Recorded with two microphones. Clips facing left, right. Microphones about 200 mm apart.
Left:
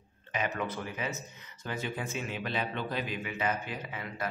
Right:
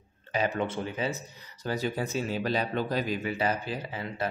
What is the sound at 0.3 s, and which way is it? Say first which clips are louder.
Speech: right 5 dB; 30° right (ahead or behind).